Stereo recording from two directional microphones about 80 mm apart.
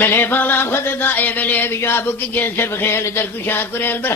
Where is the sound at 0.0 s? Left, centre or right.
Left.